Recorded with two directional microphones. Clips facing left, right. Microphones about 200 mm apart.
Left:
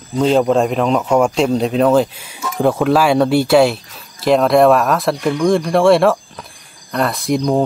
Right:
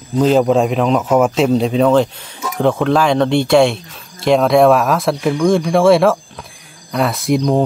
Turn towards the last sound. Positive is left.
turn(degrees=0)  # may be behind; listen again after turning